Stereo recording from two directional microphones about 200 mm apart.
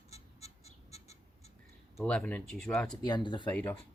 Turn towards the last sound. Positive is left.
turn(degrees=10)  # may be behind; listen again after turning